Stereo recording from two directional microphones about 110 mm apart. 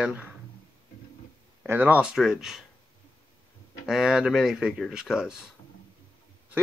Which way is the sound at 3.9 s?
5° right (ahead or behind).